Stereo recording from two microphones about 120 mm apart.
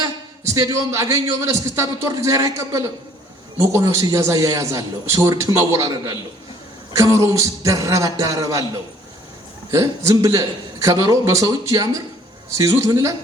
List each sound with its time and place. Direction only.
0.4 s a man's voice: 25° right (ahead or behind)